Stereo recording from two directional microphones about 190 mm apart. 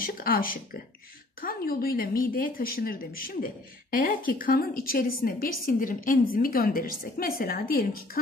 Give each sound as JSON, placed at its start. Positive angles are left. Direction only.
{"t": 0.0, "sound": "speech", "side_deg": 50}